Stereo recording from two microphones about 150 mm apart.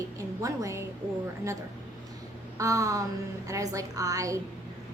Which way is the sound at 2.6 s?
20° right (ahead or behind).